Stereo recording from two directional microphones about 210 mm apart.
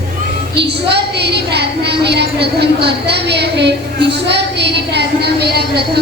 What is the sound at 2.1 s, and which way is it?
A woman's voice, 50° right (ahead or behind).